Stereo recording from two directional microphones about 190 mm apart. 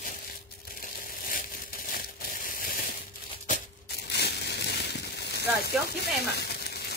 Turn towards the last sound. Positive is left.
turn(degrees=60)  # may be behind; listen again after turning